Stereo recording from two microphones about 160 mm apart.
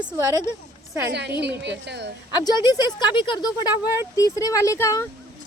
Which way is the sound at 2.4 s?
25° left (ahead or behind).